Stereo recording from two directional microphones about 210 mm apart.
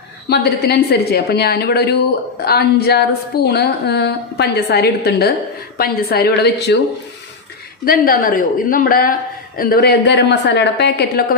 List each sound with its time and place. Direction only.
0.3 s a woman's voice: 50° left (ahead or behind)
7.9 s a woman's voice: 45° left (ahead or behind)